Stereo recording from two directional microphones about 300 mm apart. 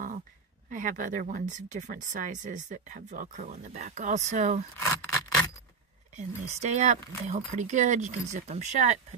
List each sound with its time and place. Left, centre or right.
0.7 s speech: right
4.7 s scrape: centre
6.1 s speech: right